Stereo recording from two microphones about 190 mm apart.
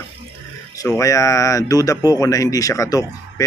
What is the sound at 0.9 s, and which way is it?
Speech, 15° left (ahead or behind).